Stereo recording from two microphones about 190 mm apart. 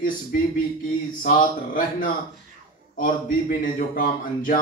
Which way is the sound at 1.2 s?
45° left (ahead or behind).